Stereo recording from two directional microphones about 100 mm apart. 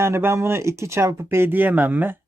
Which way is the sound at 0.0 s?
25° right (ahead or behind).